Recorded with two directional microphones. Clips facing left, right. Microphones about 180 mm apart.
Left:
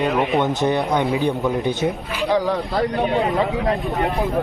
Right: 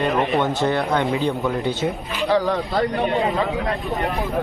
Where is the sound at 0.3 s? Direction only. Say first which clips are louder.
Left 1 dB; 15° left (ahead or behind).